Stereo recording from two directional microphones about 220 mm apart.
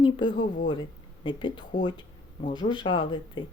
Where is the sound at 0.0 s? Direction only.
20° left (ahead or behind).